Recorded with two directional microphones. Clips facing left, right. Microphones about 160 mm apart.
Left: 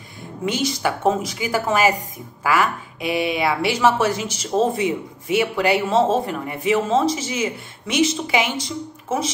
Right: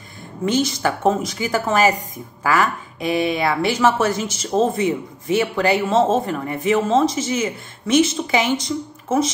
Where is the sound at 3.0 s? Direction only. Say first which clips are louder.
Right 1 dB; 10° left (ahead or behind).